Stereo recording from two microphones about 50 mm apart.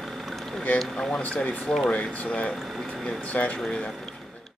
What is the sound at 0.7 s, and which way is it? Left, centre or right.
Speech, centre.